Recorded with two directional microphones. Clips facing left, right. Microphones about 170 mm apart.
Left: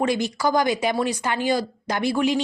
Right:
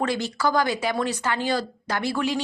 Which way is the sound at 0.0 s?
15° left (ahead or behind).